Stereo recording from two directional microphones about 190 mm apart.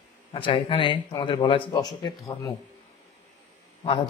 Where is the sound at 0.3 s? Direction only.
25° left (ahead or behind).